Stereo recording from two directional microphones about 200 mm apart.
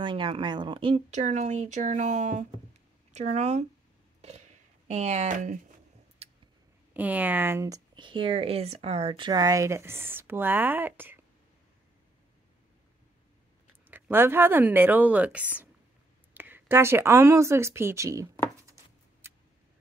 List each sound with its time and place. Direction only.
0.0 s speech: 25° right (ahead or behind)
4.2 s a sound: 35° right (ahead or behind)
6.9 s speech: 10° right (ahead or behind)
13.8 s speech: 10° right (ahead or behind)